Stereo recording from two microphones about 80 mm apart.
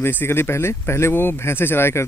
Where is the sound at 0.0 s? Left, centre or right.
Left.